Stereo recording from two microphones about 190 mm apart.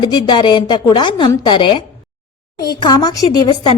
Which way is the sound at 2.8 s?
20° left (ahead or behind).